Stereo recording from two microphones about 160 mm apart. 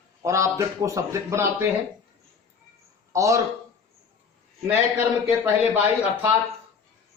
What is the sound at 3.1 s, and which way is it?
Speech, 20° right (ahead or behind).